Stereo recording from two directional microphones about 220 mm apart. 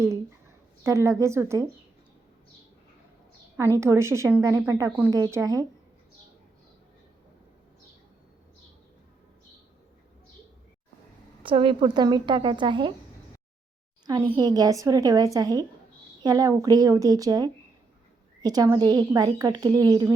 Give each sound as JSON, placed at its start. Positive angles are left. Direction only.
{"t": 0.0, "sound": "speech", "side_deg": -10}
{"t": 3.8, "sound": "a woman's voice", "side_deg": -10}
{"t": 11.4, "sound": "a woman's voice", "side_deg": -25}
{"t": 14.3, "sound": "a woman's voice", "side_deg": -15}